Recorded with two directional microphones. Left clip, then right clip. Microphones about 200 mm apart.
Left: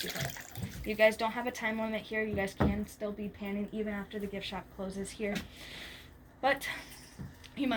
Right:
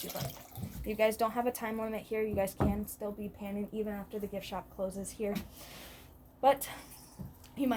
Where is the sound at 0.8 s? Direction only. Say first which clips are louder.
Left 3 dB; 30° right (ahead or behind).